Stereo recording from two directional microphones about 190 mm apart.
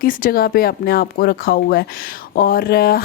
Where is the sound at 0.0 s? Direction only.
45° left (ahead or behind).